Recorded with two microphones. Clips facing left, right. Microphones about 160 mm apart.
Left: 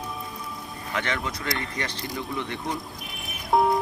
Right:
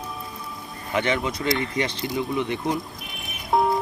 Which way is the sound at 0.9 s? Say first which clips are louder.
Right 6 dB; 20° right (ahead or behind).